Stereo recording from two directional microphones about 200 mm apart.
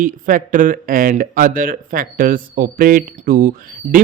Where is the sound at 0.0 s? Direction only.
40° right (ahead or behind).